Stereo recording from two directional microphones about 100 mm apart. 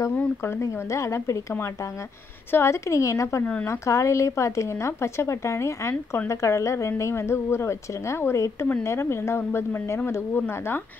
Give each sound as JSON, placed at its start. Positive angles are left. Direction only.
{"t": 0.2, "sound": "speech", "side_deg": 25}
{"t": 2.5, "sound": "a woman's voice", "side_deg": 25}